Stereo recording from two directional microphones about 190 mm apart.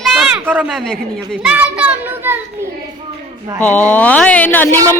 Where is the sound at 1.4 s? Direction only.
5° right (ahead or behind).